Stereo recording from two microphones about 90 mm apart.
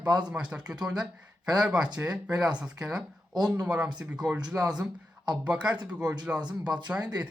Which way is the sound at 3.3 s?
50° right (ahead or behind).